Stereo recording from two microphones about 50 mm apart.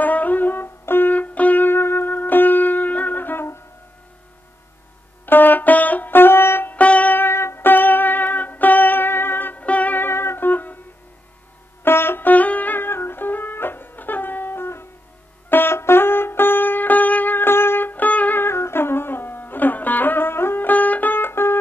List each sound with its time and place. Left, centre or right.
0.0 s music: left
1.1 s music: left
1.7 s music: left
5.2 s music: left
6.1 s music: left
6.7 s music: left
7.2 s music: left
9.6 s music: left
9.9 s music: left
11.8 s music: left
12.3 s music: left
18.4 s music: left
20.7 s music: left